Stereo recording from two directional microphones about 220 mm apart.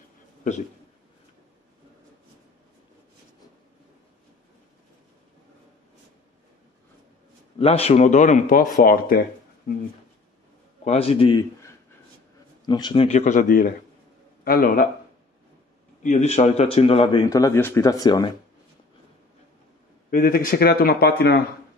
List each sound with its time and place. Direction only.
7.5 s speech: 25° left (ahead or behind)
10.8 s speech: 30° left (ahead or behind)
12.6 s speech: 20° left (ahead or behind); by 14.9 s 40° left (ahead or behind)
16.0 s speech: 30° left (ahead or behind)
20.1 s speech: 40° left (ahead or behind)